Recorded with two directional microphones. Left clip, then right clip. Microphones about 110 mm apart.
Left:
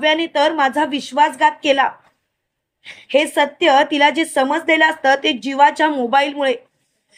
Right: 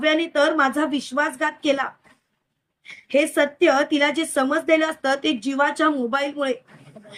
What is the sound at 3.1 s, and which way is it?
A woman's voice, 50° left (ahead or behind).